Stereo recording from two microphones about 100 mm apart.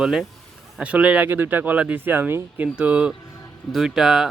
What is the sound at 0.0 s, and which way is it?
Speech, 5° right (ahead or behind).